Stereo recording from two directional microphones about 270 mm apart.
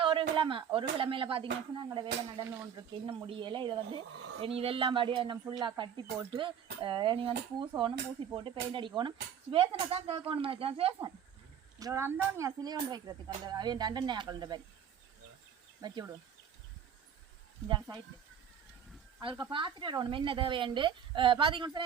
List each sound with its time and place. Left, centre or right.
0.0 s speech: centre
15.8 s speech: centre
17.7 s speech: centre
19.2 s speech: centre